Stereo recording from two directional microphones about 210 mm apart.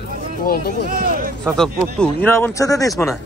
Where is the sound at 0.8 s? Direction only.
40° right (ahead or behind).